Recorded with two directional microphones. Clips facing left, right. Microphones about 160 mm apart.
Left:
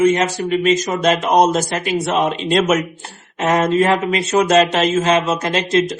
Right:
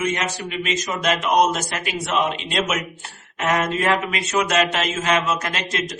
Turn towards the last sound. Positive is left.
turn(degrees=30)  # may be behind; listen again after turning